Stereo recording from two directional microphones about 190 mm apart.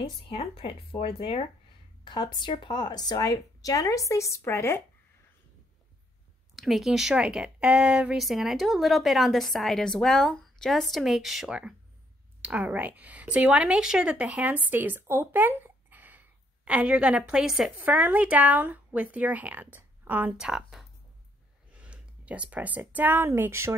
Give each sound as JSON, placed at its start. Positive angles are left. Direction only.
{"t": 0.3, "sound": "speech", "side_deg": 30}
{"t": 6.5, "sound": "a woman's voice", "side_deg": 0}